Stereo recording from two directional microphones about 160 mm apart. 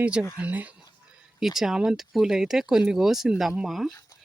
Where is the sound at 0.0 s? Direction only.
5° right (ahead or behind).